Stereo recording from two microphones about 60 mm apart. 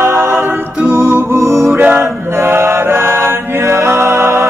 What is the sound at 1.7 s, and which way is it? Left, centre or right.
Mantra, right.